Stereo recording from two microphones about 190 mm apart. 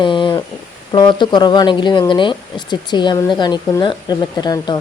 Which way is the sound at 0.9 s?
25° left (ahead or behind).